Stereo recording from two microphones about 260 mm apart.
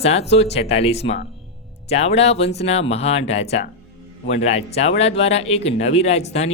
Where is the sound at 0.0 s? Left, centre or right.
Left.